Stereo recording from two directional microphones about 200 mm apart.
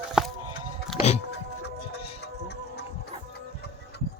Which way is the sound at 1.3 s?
55° left (ahead or behind).